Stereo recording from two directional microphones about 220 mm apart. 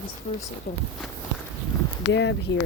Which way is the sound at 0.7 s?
40° left (ahead or behind).